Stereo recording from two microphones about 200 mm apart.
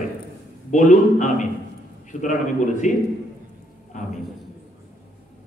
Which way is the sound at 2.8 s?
40° left (ahead or behind).